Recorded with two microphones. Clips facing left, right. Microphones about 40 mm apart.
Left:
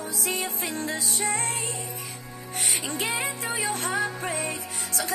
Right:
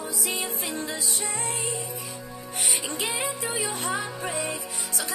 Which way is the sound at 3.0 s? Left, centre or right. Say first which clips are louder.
Left 1 dB; left.